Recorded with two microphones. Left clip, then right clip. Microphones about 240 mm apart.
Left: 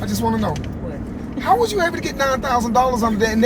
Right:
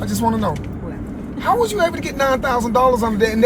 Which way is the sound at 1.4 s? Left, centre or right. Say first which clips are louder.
Even; right.